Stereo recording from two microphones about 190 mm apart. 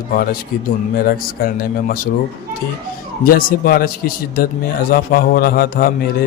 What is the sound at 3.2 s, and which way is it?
A man's voice, 50° left (ahead or behind).